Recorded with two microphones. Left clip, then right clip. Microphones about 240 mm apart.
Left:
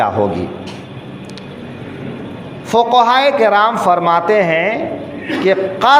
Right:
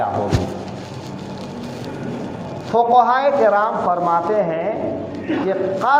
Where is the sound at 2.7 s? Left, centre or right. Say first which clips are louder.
Left 3 dB; left.